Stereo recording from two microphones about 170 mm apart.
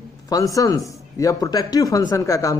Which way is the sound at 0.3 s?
20° left (ahead or behind).